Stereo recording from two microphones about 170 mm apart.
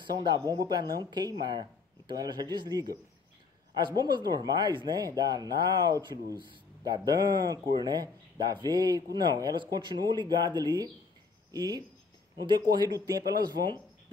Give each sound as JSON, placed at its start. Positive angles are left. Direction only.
{"t": 0.0, "sound": "speech", "side_deg": -25}